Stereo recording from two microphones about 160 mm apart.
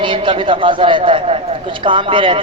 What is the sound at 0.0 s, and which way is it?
Speech, 30° right (ahead or behind).